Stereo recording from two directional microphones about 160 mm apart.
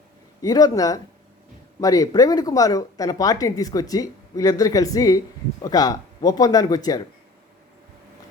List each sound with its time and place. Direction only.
0.4 s speech: 20° left (ahead or behind)